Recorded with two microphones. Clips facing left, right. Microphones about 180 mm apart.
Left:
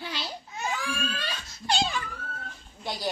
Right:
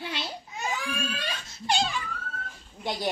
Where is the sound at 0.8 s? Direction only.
20° right (ahead or behind).